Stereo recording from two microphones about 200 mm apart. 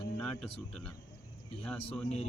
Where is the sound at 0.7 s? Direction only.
5° left (ahead or behind).